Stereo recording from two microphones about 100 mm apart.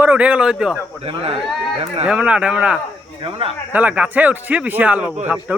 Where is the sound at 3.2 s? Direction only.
65° right (ahead or behind).